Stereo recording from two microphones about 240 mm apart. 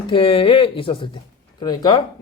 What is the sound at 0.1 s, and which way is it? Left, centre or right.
A man's voice, left.